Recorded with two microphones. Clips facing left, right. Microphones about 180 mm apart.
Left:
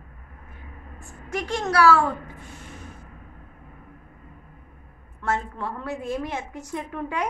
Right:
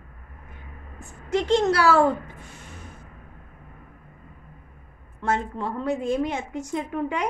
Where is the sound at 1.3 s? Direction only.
25° right (ahead or behind).